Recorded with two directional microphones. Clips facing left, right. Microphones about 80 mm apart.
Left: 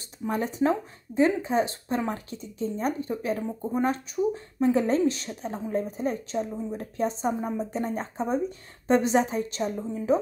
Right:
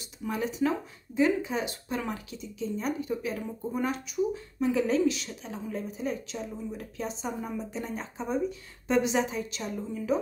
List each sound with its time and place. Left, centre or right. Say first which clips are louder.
0.3 s speech: left 3 dB; left